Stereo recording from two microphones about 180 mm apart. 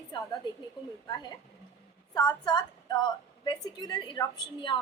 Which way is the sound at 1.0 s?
20° left (ahead or behind).